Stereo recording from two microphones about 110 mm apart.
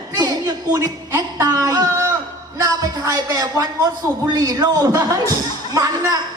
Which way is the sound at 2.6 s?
35° right (ahead or behind).